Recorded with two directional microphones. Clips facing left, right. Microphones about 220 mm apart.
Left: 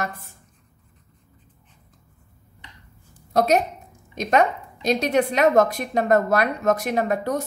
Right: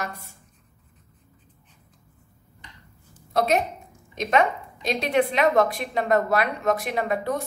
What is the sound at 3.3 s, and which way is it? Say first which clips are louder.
A woman's voice: left 3 dB; 40° left (ahead or behind).